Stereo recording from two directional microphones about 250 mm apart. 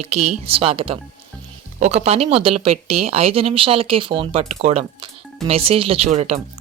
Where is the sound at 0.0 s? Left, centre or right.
Right.